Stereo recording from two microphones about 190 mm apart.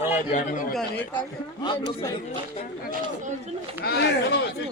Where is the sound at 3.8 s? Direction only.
55° left (ahead or behind).